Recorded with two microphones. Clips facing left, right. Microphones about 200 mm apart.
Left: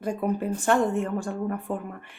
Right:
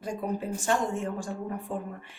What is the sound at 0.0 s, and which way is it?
Speech, 60° left (ahead or behind).